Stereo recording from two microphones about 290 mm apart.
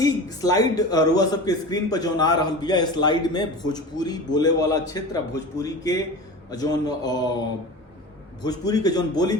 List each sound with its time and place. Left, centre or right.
0.0 s a man's voice: centre
8.4 s a man's voice: centre